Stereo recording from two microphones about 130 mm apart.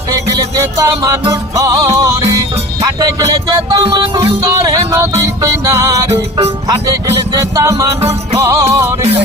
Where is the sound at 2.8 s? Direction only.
30° right (ahead or behind).